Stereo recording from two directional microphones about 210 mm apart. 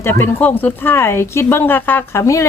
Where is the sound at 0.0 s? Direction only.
10° left (ahead or behind).